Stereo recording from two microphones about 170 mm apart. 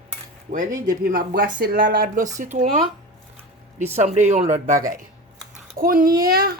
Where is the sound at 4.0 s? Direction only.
45° right (ahead or behind).